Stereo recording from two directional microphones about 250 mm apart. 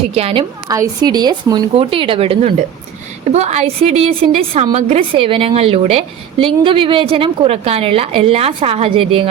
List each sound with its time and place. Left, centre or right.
0.1 s a woman's voice: right